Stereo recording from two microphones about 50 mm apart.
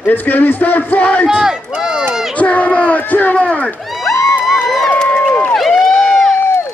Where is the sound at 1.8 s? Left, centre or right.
Centre.